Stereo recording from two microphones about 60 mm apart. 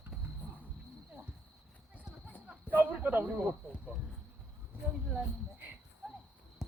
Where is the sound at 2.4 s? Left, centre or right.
Right.